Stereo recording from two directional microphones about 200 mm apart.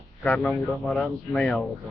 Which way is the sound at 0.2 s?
5° left (ahead or behind).